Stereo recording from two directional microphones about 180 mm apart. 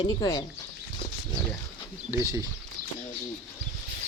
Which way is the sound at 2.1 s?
15° right (ahead or behind).